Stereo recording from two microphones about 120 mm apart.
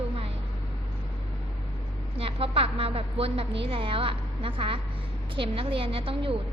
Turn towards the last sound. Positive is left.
turn(degrees=-50)  # may be behind; listen again after turning